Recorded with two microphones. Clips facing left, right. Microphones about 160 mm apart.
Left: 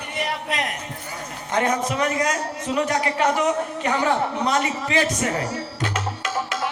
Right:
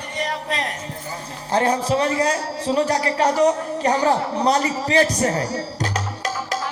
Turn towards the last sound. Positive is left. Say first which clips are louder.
# right 2 dB
turn(degrees=-35)  # may be behind; listen again after turning